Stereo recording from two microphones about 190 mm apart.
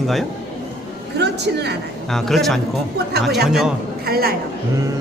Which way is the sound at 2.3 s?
Centre (ahead or behind).